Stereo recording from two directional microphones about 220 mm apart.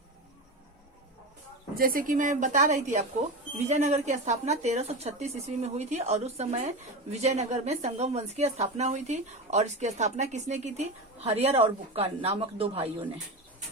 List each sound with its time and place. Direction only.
1.7 s a woman's voice: 40° right (ahead or behind)